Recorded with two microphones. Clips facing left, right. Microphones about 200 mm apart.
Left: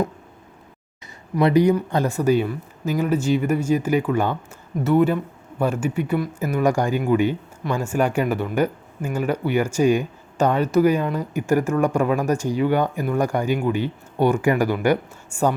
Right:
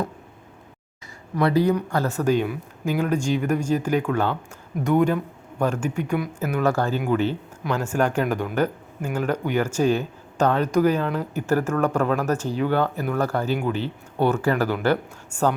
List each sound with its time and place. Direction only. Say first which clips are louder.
1.4 s speech: left 3 dB; 15° left (ahead or behind); by 6.6 s centre (ahead or behind)
6.6 s speech: left 2 dB; 15° left (ahead or behind)